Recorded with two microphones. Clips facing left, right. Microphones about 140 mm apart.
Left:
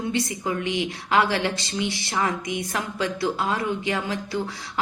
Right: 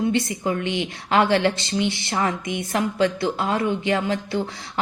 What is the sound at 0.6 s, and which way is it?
A woman's voice, 25° right (ahead or behind).